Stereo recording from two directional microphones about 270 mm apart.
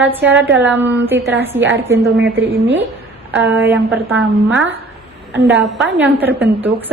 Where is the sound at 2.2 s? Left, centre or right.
Right.